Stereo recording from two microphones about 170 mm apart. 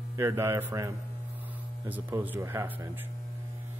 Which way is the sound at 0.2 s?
15° right (ahead or behind).